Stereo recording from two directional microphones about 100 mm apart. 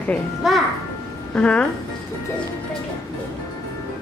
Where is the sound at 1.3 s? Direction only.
10° left (ahead or behind).